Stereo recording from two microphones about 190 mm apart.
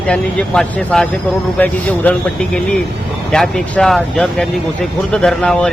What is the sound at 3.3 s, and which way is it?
A man's voice, 5° left (ahead or behind).